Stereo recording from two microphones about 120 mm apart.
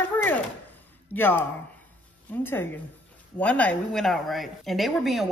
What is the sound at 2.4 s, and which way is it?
A woman's voice, 20° left (ahead or behind).